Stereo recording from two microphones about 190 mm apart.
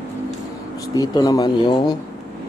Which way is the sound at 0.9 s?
20° left (ahead or behind).